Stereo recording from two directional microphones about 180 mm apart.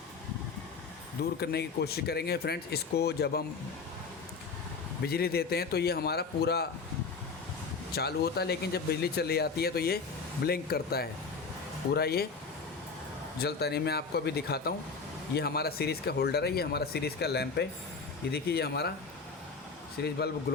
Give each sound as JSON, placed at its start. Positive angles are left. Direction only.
{"t": 1.4, "sound": "speech", "side_deg": 65}
{"t": 5.0, "sound": "speech", "side_deg": 60}
{"t": 7.9, "sound": "speech", "side_deg": 60}
{"t": 13.4, "sound": "speech", "side_deg": 65}
{"t": 20.0, "sound": "speech", "side_deg": 65}